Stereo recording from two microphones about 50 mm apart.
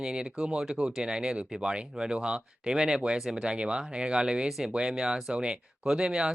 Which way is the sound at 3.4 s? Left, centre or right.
Centre.